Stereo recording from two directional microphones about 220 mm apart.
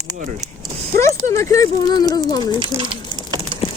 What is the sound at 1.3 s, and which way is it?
Speech, 15° left (ahead or behind).